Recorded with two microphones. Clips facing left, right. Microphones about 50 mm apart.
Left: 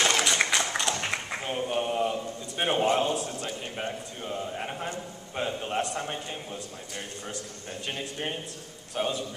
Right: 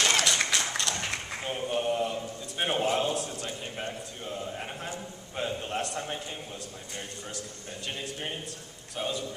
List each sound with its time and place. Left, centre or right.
0.2 s a sound: centre
5.3 s a man's voice: centre
7.9 s a man's voice: centre